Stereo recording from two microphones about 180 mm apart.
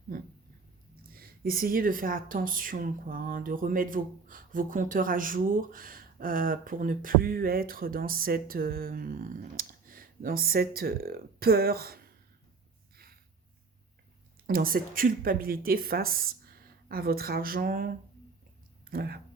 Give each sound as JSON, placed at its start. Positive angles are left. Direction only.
{"t": 1.1, "sound": "speech", "side_deg": -55}
{"t": 14.4, "sound": "speech", "side_deg": -55}